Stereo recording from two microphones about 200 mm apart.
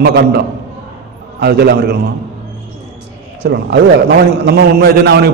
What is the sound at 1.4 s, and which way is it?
Speech, 55° right (ahead or behind).